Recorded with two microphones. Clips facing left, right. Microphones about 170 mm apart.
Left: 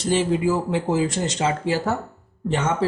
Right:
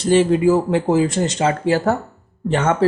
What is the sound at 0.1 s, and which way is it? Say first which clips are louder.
Speech: right 7 dB; 65° right (ahead or behind).